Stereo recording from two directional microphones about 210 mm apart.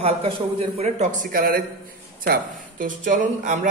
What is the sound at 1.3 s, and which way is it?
Speech, 45° right (ahead or behind).